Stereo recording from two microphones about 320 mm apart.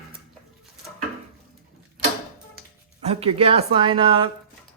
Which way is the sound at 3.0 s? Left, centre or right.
Centre.